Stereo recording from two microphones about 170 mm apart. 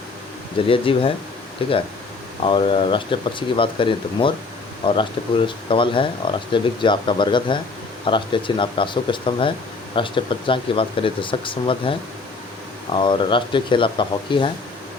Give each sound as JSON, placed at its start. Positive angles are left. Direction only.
{"t": 0.7, "sound": "speech", "side_deg": 30}